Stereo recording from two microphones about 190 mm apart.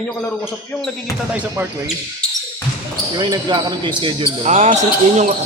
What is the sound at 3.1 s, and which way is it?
Speech, 20° right (ahead or behind).